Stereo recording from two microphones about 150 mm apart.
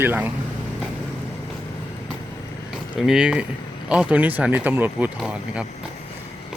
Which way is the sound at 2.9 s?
5° right (ahead or behind).